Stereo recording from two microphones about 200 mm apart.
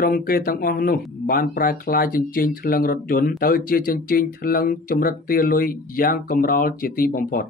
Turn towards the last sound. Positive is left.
turn(degrees=45)  # may be behind; listen again after turning